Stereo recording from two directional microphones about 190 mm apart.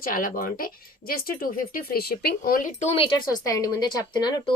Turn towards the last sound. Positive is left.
turn(degrees=25)  # may be behind; listen again after turning